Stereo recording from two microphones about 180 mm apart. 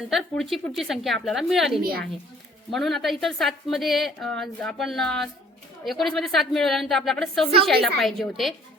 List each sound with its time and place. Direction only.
0.1 s a woman's voice: centre (ahead or behind)
1.8 s a woman's voice: 60° right (ahead or behind)
2.6 s a woman's voice: centre (ahead or behind)